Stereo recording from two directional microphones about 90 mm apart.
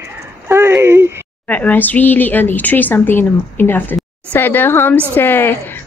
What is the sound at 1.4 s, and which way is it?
A woman's voice, 15° left (ahead or behind).